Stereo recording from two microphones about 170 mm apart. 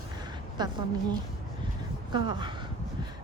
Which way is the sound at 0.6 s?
25° right (ahead or behind).